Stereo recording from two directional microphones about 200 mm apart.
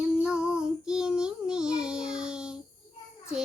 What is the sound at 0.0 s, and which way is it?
Child singing, 5° right (ahead or behind).